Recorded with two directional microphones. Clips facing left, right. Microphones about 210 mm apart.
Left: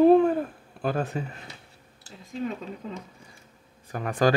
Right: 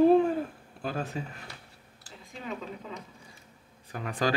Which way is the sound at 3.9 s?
45° left (ahead or behind).